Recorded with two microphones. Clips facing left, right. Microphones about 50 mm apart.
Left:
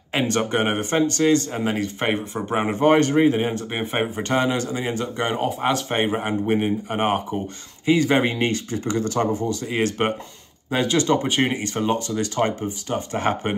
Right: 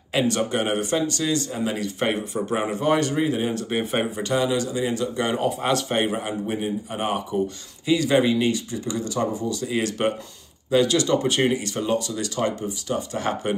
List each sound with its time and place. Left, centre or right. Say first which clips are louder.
0.1 s speech: left 1 dB; left
2.0 s speech: even; left
4.2 s speech: left 2 dB; left
6.2 s speech: left 5 dB; left
11.2 s speech: even; centre
11.5 s speech: left 1 dB; left